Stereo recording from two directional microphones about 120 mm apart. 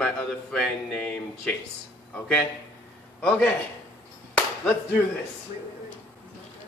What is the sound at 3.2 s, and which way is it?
Speech, 10° left (ahead or behind).